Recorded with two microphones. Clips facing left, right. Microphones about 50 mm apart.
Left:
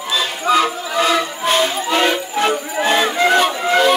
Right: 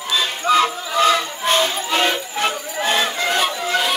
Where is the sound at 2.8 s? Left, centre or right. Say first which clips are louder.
Left 4 dB; left.